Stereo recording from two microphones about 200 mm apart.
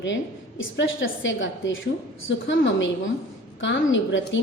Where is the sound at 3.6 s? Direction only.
65° left (ahead or behind).